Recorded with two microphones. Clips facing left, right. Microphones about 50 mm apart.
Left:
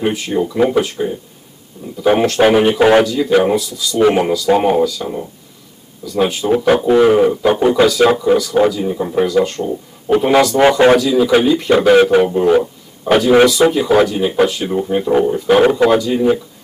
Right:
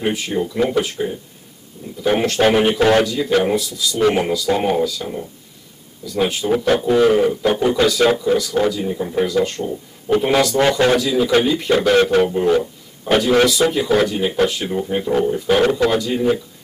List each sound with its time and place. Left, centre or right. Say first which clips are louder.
0.0 s speech: left 3 dB; centre
2.1 s speech: left 3 dB; centre
6.6 s a man's voice: left 4 dB; centre
10.6 s a man's voice: left 7 dB; left
11.0 s speech: left 4 dB; centre
11.7 s speech: left 4 dB; centre